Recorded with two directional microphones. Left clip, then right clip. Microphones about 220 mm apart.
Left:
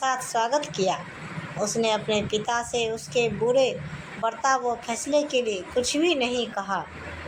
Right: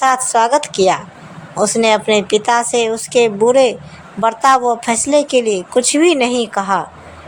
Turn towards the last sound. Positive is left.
turn(degrees=-45)  # may be behind; listen again after turning